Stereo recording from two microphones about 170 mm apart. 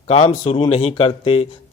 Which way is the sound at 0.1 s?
35° left (ahead or behind).